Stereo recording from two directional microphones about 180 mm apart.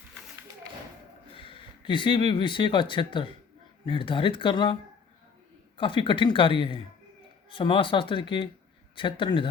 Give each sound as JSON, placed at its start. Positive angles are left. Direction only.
{"t": 1.4, "sound": "speech", "side_deg": 30}